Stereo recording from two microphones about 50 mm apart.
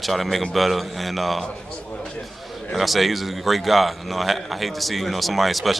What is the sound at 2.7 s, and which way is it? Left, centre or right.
A man's voice, centre.